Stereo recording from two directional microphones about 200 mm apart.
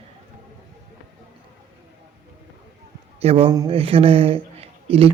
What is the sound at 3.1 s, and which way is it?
A man's voice, 30° right (ahead or behind).